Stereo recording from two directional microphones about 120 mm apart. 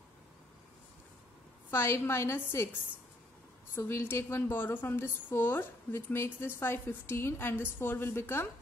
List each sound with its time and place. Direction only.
1.7 s a woman's voice: 20° left (ahead or behind)
3.7 s a woman's voice: 20° left (ahead or behind)